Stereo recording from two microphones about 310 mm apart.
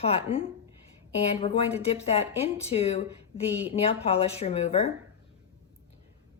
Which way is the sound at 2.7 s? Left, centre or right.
Centre.